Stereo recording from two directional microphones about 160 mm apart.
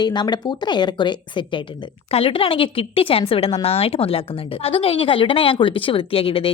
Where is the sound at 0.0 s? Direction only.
25° left (ahead or behind).